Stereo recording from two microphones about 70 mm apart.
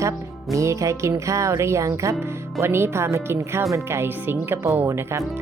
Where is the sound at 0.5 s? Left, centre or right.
Right.